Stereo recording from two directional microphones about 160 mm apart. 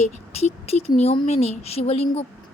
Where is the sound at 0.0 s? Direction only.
40° left (ahead or behind).